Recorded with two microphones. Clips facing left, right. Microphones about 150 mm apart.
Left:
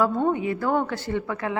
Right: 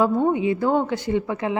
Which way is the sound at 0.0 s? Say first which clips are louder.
Right 3 dB; 15° right (ahead or behind).